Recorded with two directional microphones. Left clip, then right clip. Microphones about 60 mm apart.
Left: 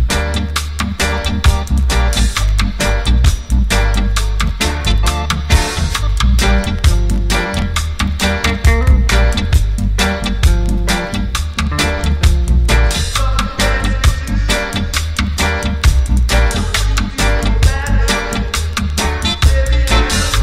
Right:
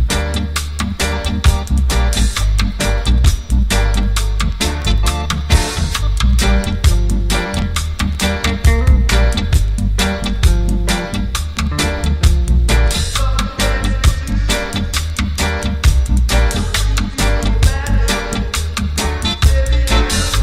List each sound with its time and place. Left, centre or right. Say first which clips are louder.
0.1 s music: left 2 dB; right